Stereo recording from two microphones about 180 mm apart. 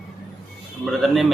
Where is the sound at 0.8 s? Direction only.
Centre (ahead or behind).